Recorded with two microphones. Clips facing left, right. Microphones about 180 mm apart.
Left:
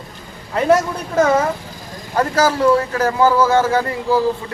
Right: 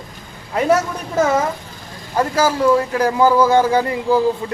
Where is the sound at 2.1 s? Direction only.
10° right (ahead or behind).